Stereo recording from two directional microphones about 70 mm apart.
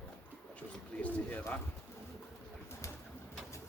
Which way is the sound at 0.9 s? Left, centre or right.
Left.